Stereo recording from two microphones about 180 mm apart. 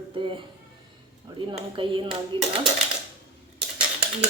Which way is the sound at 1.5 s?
30° right (ahead or behind).